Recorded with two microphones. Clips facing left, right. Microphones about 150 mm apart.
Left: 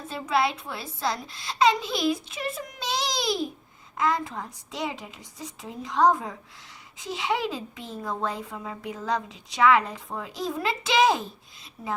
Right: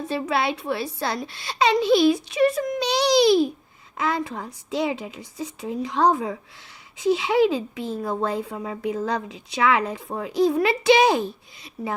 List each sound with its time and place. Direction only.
0.1 s a child's voice: 70° right (ahead or behind)